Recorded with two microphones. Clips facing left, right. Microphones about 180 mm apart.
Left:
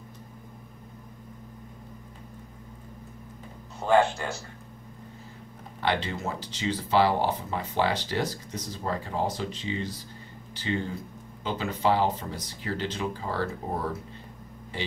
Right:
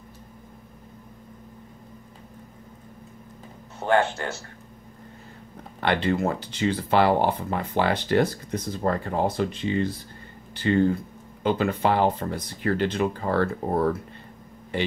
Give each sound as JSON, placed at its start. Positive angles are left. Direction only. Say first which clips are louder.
{"t": 3.8, "sound": "speech", "louder": "right 1 dB", "side_deg": -15}
{"t": 5.8, "sound": "speech", "louder": "right 6 dB", "side_deg": -60}